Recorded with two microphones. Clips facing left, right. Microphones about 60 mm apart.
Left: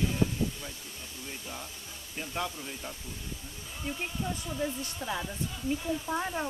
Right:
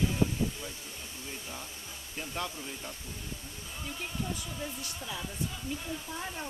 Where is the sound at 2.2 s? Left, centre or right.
Centre.